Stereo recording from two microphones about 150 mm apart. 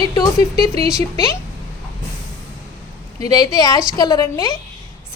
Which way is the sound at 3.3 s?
25° left (ahead or behind).